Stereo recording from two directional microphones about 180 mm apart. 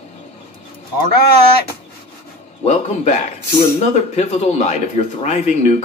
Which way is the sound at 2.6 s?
40° left (ahead or behind).